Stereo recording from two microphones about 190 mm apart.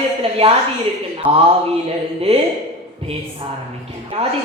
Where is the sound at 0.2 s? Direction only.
30° right (ahead or behind).